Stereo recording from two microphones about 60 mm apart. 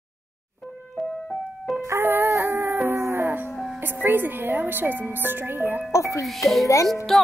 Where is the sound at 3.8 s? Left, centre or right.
Right.